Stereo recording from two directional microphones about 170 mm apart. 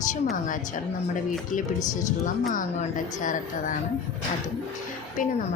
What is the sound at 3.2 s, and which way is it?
Speech, 50° left (ahead or behind).